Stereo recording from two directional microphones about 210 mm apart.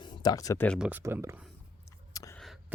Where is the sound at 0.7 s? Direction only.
5° right (ahead or behind).